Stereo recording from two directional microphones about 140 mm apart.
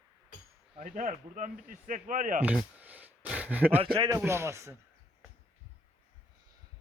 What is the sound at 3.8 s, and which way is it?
Speech, 35° right (ahead or behind).